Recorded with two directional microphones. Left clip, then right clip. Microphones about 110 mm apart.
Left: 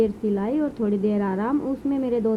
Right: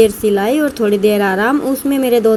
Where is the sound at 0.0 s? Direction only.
35° right (ahead or behind).